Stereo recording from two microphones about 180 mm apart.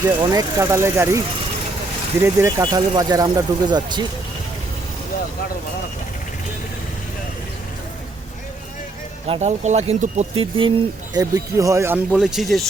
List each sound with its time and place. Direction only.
0.0 s speech: 20° right (ahead or behind)
2.2 s speech: 20° right (ahead or behind)
9.2 s speech: 35° right (ahead or behind); by 11.9 s 15° right (ahead or behind)
12.1 s speech: centre (ahead or behind)